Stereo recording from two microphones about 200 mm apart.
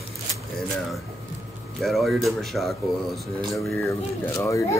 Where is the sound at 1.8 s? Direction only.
Centre (ahead or behind).